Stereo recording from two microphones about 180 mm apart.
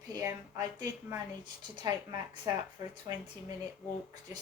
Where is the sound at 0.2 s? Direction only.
15° right (ahead or behind).